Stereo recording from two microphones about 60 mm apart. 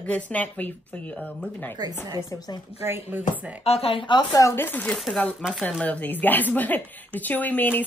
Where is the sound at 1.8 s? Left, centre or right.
Right.